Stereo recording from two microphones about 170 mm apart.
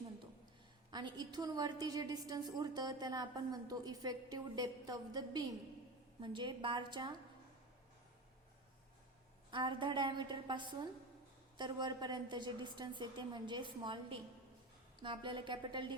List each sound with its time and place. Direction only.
0.9 s a woman's voice: 25° right (ahead or behind)
9.5 s a woman's voice: 30° right (ahead or behind)